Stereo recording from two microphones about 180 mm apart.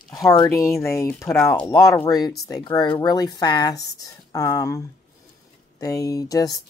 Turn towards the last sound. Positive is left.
turn(degrees=20)  # may be behind; listen again after turning